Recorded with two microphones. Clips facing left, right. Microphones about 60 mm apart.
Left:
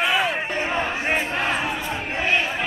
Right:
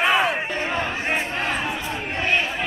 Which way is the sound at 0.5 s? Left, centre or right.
Centre.